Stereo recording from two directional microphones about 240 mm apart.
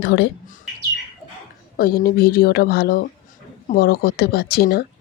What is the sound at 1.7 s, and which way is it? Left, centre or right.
Speech, left.